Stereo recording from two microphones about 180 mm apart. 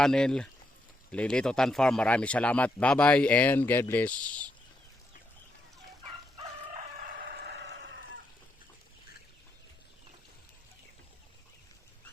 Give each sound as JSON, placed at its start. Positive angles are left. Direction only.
{"t": 0.0, "sound": "speech", "side_deg": 5}
{"t": 7.3, "sound": "chicken", "side_deg": -70}